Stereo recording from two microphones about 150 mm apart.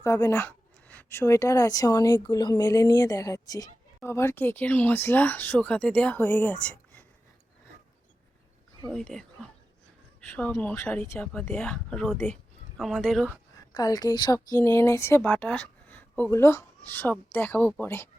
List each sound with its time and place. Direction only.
0.0 s speech: 20° left (ahead or behind)
8.9 s speech: 5° left (ahead or behind)
13.7 s speech: 25° left (ahead or behind)